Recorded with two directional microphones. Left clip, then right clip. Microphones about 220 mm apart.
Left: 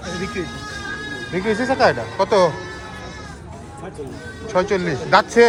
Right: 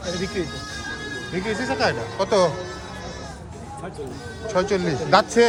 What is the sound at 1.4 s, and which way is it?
Speech, 5° right (ahead or behind).